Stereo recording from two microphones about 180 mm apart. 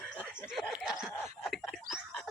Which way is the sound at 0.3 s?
5° right (ahead or behind).